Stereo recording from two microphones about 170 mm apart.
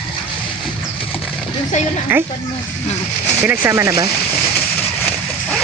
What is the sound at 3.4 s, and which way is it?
Speech, 10° right (ahead or behind).